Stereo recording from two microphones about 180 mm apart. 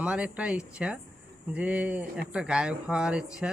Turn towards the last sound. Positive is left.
turn(degrees=-5)  # may be behind; listen again after turning